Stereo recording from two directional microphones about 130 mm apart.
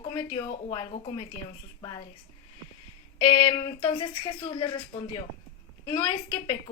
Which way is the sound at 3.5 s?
35° left (ahead or behind).